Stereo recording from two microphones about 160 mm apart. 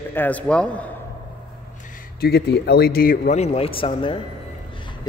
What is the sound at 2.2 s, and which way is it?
A man's voice, 80° left.